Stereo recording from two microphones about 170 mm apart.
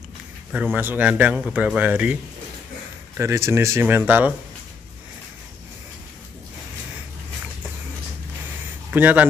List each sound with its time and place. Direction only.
0.5 s a man's voice: 10° right (ahead or behind)
3.2 s a man's voice: 15° right (ahead or behind)
8.9 s a man's voice: 10° right (ahead or behind)